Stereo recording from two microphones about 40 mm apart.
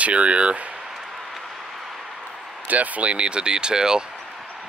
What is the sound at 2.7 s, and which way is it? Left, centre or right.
Speech, right.